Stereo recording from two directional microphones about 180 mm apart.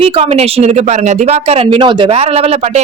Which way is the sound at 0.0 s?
35° right (ahead or behind).